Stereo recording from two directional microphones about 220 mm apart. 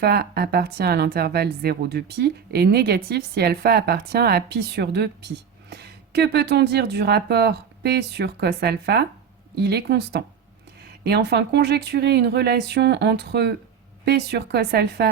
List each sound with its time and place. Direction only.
0.0 s speech: 45° right (ahead or behind)